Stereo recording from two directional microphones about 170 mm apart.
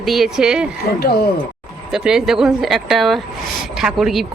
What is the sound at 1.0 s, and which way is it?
Speech, 65° left (ahead or behind).